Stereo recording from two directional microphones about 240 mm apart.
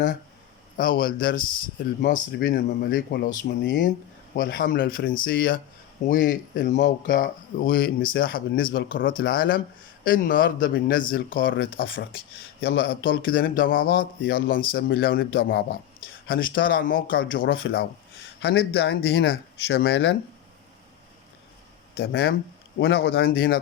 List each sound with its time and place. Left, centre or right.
0.8 s speech: left
21.9 s speech: left